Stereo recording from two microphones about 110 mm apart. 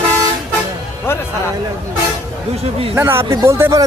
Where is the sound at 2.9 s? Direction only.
25° right (ahead or behind).